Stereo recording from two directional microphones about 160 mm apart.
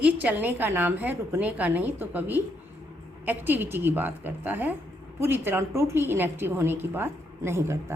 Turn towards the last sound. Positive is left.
turn(degrees=-15)  # may be behind; listen again after turning